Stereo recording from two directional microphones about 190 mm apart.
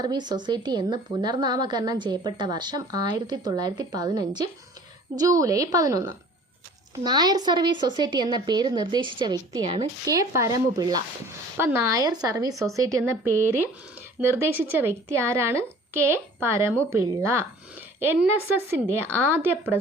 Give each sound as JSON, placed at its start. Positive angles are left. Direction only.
{"t": 0.0, "sound": "a woman's voice", "side_deg": -20}